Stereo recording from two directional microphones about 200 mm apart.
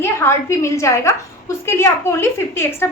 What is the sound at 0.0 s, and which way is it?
A woman's voice, 15° left (ahead or behind).